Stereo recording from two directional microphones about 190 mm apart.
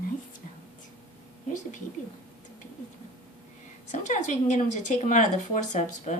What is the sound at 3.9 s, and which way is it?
A woman's voice, 40° left (ahead or behind).